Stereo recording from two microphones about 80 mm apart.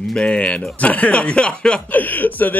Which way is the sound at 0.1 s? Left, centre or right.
Centre.